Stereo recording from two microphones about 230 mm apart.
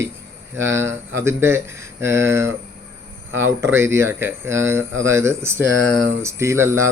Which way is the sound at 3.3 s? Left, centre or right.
Right.